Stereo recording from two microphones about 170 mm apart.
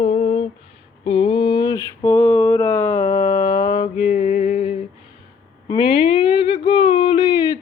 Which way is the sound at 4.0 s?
40° left (ahead or behind).